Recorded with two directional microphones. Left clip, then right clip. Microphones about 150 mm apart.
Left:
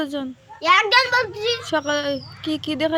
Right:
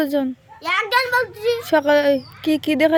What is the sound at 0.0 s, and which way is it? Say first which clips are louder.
Speech: right 6 dB; 50° right (ahead or behind).